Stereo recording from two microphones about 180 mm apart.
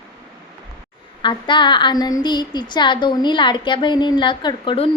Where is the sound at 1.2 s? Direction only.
25° left (ahead or behind).